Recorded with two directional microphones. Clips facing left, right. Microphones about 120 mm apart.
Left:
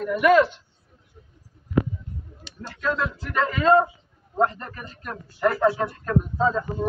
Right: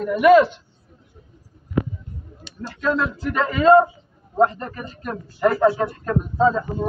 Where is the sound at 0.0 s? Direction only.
20° right (ahead or behind).